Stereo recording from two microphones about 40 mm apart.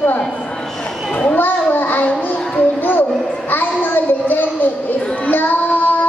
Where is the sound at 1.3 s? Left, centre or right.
Left.